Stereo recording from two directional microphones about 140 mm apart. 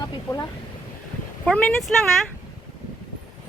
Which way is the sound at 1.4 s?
5° left (ahead or behind).